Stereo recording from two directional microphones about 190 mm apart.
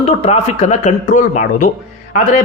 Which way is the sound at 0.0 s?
35° left (ahead or behind).